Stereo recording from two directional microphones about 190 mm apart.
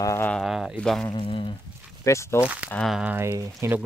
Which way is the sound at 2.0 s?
15° left (ahead or behind).